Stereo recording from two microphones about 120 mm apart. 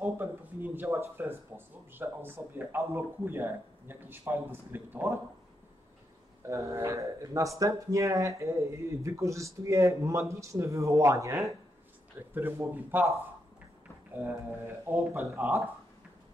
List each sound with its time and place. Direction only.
0.0 s a sound: 15° right (ahead or behind)
2.0 s a man's voice: 15° right (ahead or behind)
6.4 s a man's voice: 25° right (ahead or behind)